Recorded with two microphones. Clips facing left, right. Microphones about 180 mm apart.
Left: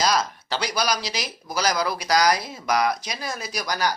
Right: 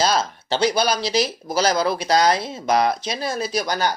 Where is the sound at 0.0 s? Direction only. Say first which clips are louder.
Right 2 dB; 25° right (ahead or behind).